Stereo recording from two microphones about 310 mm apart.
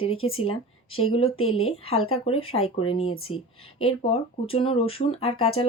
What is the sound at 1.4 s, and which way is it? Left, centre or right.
Speech, left.